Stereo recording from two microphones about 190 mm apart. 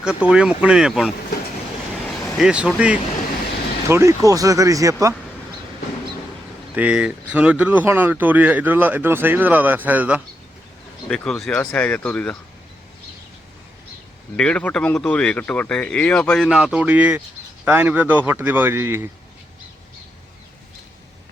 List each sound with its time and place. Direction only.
0.0 s speech: 5° right (ahead or behind)
6.7 s speech: 5° right (ahead or behind)
11.1 s speech: 5° left (ahead or behind)
14.3 s speech: 5° left (ahead or behind); by 19.0 s 15° right (ahead or behind)